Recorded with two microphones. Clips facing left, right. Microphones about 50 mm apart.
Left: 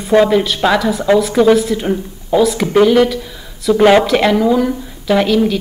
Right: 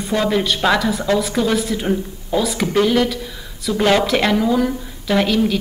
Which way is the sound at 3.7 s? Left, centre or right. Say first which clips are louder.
Left 8 dB; left.